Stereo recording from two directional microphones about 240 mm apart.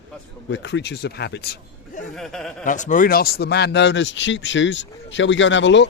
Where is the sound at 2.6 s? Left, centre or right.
Left.